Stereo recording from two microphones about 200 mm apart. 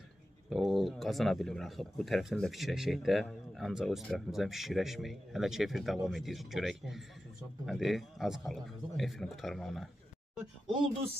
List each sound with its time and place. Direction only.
0.5 s speech: centre (ahead or behind)